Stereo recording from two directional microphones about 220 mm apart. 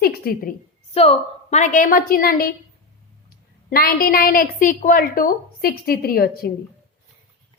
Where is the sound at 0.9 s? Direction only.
30° left (ahead or behind).